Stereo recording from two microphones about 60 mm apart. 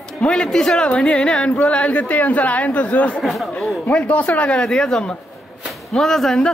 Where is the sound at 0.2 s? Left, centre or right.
Centre.